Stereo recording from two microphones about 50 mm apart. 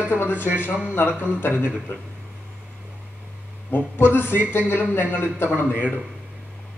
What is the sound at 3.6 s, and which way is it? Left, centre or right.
Speech, left.